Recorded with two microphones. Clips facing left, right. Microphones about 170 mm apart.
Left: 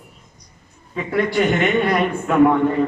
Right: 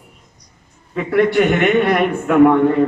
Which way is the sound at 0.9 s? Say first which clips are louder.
Right 5 dB; 60° right (ahead or behind).